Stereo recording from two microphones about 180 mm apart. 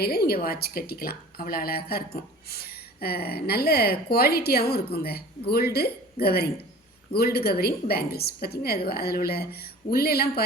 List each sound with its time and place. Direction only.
0.0 s a woman's voice: 60° left (ahead or behind)